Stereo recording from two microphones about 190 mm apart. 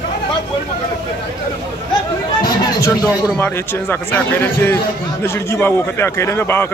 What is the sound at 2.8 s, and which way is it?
A man's voice, 20° left (ahead or behind).